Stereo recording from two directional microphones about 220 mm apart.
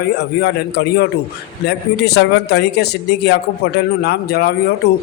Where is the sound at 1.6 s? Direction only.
50° left (ahead or behind).